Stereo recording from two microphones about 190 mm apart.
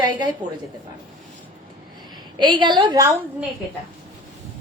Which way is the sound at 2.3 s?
25° right (ahead or behind).